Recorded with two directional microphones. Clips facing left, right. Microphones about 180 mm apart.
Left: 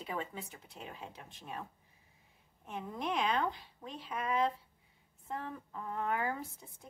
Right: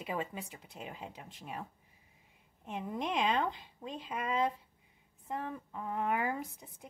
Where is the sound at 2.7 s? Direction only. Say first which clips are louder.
Right 1 dB; 15° right (ahead or behind).